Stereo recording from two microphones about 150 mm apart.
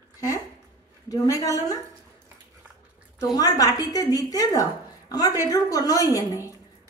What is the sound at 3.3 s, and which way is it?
Speech, 25° left (ahead or behind).